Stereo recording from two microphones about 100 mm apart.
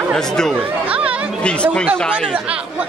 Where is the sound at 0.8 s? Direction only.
15° right (ahead or behind).